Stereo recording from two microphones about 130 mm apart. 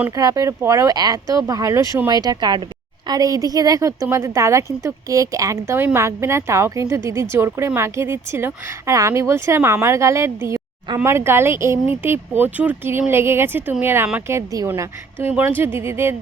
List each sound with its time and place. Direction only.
0.2 s a woman's voice: 25° right (ahead or behind)